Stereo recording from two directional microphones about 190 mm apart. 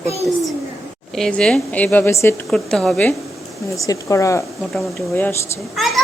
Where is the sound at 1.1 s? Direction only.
5° left (ahead or behind).